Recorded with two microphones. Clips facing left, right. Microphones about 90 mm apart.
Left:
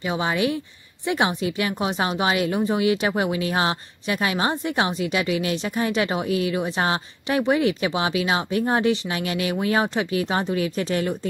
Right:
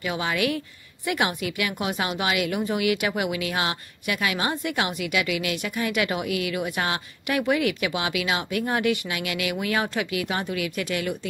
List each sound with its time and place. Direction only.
0.0 s a woman's voice: 25° left (ahead or behind)